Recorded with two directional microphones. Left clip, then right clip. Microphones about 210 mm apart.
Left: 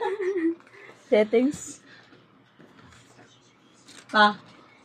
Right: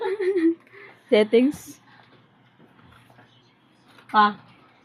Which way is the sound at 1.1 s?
40° right (ahead or behind).